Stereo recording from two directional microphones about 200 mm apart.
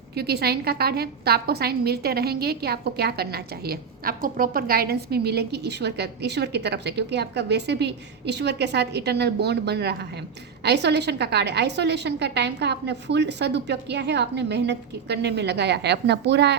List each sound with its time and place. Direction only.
0.2 s a woman's voice: 55° right (ahead or behind)